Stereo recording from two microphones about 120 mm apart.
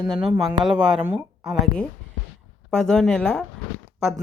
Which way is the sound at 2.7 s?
5° left (ahead or behind).